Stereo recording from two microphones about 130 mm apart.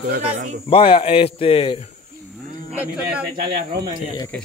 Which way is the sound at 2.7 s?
10° right (ahead or behind).